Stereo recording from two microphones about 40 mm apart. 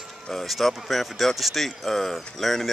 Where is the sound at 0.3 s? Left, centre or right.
Centre.